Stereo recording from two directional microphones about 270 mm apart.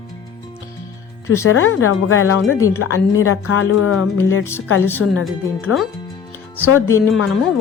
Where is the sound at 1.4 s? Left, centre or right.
Left.